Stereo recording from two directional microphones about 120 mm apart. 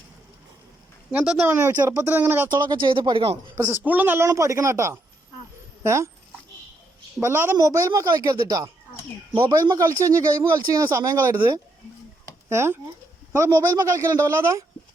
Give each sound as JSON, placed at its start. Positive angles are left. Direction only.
{"t": 1.1, "sound": "speech", "side_deg": -5}
{"t": 1.5, "sound": "speech", "side_deg": -20}
{"t": 2.5, "sound": "speech", "side_deg": -40}
{"t": 3.7, "sound": "speech", "side_deg": -15}
{"t": 7.2, "sound": "speech", "side_deg": -20}